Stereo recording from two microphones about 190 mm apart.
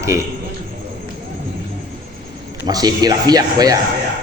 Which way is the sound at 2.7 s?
20° right (ahead or behind).